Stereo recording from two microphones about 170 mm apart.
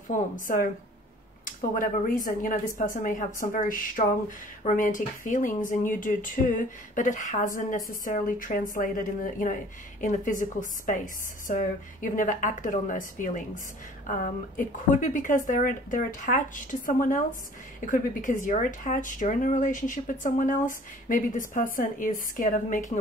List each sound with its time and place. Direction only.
0.1 s speech: 50° left (ahead or behind)
15.0 s speech: 50° left (ahead or behind)